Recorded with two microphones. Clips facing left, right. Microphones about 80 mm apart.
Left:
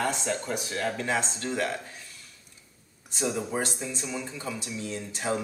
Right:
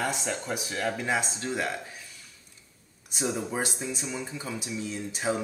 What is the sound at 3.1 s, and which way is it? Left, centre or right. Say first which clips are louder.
Speech: left 1 dB; centre.